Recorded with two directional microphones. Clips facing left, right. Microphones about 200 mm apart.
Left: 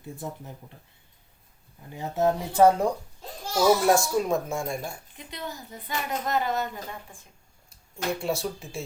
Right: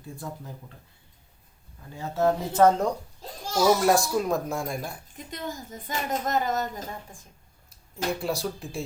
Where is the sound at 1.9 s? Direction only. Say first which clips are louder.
Even; 15° left (ahead or behind).